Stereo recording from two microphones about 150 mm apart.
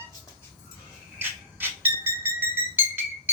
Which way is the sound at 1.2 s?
15° right (ahead or behind).